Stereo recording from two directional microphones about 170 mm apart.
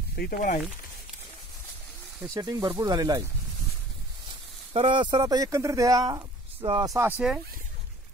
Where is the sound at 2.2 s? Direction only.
20° right (ahead or behind).